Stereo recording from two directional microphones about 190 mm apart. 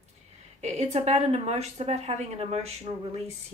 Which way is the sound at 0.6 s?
35° right (ahead or behind).